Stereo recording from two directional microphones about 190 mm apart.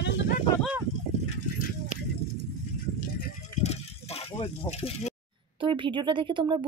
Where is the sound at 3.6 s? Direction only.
35° left (ahead or behind).